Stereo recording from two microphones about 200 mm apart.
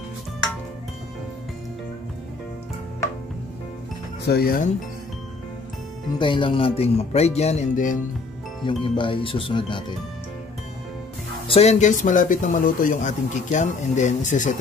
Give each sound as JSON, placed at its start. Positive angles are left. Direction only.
{"t": 4.3, "sound": "speech", "side_deg": 45}
{"t": 6.1, "sound": "speech", "side_deg": 25}
{"t": 8.8, "sound": "speech", "side_deg": 25}
{"t": 11.4, "sound": "speech", "side_deg": 30}